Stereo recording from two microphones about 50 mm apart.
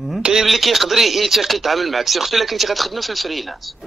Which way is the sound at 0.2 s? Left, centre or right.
Centre.